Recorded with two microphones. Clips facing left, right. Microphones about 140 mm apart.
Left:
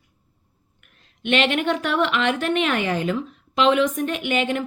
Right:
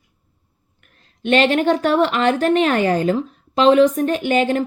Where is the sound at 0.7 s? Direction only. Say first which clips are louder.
Right 3 dB; 40° right (ahead or behind).